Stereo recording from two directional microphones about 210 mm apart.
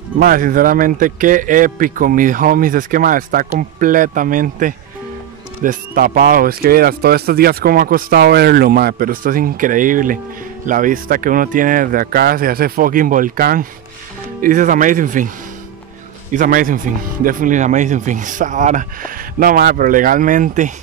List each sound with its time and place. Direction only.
0.2 s a man's voice: 45° right (ahead or behind)